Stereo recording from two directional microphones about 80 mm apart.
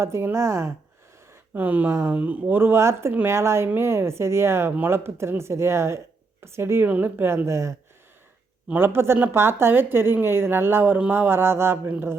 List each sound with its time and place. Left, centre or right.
0.0 s speech: right
1.5 s a woman's voice: right